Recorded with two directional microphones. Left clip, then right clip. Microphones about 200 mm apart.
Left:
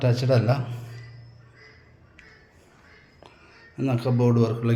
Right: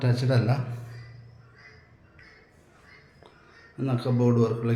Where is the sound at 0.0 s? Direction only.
20° left (ahead or behind).